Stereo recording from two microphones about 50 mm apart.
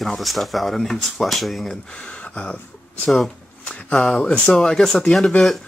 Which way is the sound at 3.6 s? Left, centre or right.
Centre.